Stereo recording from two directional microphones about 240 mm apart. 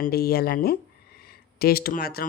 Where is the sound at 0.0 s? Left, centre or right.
Left.